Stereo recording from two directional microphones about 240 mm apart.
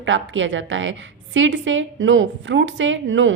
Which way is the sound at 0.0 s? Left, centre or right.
Right.